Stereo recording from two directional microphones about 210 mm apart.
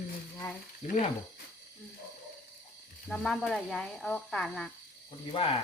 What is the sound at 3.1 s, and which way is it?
Speech, centre (ahead or behind).